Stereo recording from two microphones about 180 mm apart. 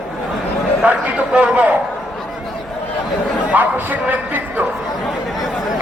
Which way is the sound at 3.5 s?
10° right (ahead or behind).